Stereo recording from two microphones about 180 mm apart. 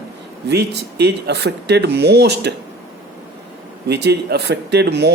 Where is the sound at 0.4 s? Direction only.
70° right (ahead or behind).